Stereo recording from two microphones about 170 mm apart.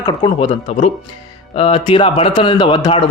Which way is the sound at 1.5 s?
35° left (ahead or behind).